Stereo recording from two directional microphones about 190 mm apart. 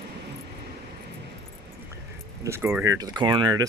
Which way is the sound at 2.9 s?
20° right (ahead or behind).